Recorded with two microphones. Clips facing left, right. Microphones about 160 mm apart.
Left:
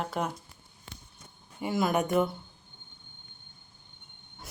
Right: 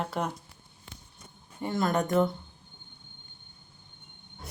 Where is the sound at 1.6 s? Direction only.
5° left (ahead or behind).